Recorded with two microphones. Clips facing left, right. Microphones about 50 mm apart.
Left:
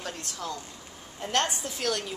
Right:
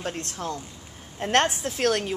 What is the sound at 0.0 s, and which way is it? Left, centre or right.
Speech, right.